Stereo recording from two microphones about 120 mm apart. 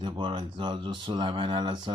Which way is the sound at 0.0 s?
40° right (ahead or behind).